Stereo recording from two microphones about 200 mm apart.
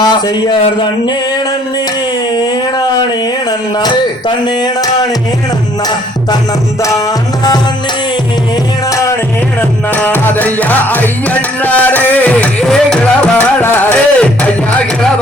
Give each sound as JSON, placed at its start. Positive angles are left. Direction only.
{"t": 0.0, "sound": "speech", "side_deg": 20}
{"t": 2.3, "sound": "speech", "side_deg": 20}
{"t": 4.4, "sound": "speech", "side_deg": 20}
{"t": 8.9, "sound": "music", "side_deg": 15}